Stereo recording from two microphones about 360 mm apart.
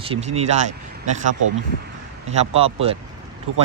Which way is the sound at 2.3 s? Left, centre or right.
Centre.